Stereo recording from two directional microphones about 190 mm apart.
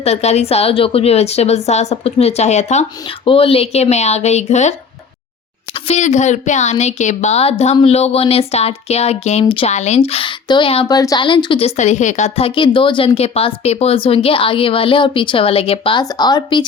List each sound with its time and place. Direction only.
0.0 s speech: 35° left (ahead or behind)
5.7 s speech: 35° left (ahead or behind)